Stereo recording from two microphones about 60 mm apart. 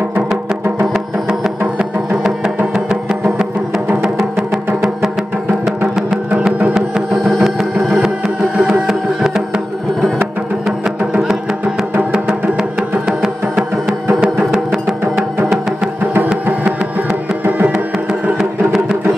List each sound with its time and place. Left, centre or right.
1.8 s music: centre
7.1 s music: centre
8.5 s music: centre
8.8 s music: centre
12.3 s music: centre
17.5 s music: right
18.4 s music: centre